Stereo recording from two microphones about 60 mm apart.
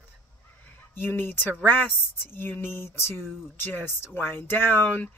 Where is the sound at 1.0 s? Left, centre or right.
Left.